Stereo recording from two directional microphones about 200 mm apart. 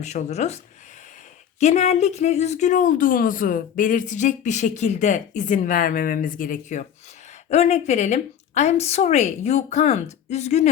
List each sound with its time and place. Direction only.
0.0 s speech: 35° left (ahead or behind)